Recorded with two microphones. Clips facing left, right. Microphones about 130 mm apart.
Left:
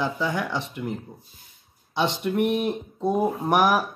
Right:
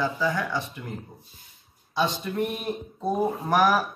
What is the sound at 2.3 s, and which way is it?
Speech, 20° left (ahead or behind).